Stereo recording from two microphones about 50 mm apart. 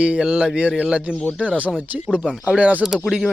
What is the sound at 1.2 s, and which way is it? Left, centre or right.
Speech, left.